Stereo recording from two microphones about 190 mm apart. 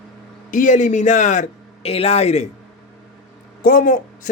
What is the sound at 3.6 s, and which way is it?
Speech, 45° left (ahead or behind).